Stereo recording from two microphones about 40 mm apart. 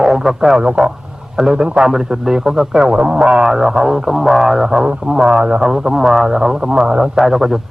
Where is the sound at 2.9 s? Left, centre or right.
Right.